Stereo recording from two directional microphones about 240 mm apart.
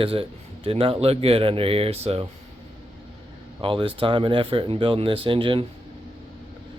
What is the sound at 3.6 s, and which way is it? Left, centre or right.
Speech, right.